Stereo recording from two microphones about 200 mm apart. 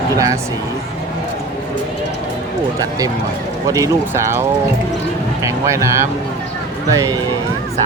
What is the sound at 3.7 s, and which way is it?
Speech, 15° right (ahead or behind).